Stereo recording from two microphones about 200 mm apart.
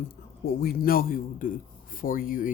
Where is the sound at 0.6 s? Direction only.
45° left (ahead or behind).